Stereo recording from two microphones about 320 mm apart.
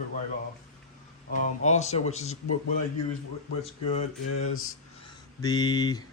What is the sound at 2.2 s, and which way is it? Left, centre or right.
Speech, left.